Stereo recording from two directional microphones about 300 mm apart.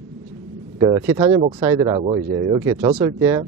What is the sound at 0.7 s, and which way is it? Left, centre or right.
A woman's voice, centre.